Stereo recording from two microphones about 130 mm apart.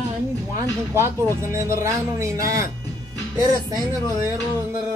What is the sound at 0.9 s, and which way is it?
Speech, 20° right (ahead or behind).